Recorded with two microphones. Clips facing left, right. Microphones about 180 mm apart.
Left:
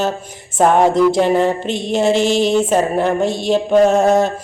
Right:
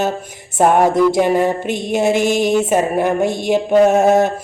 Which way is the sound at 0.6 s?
10° right (ahead or behind).